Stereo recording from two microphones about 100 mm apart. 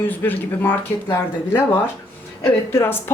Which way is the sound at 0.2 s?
20° left (ahead or behind).